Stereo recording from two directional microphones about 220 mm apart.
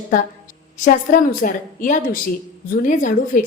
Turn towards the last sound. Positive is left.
turn(degrees=35)  # may be behind; listen again after turning